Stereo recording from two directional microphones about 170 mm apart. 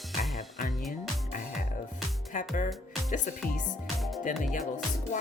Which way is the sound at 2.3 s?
50° left (ahead or behind).